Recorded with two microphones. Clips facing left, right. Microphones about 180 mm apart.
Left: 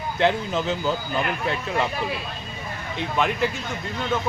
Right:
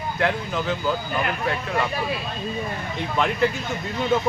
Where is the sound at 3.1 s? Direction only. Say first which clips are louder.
Right 2 dB; 5° left (ahead or behind).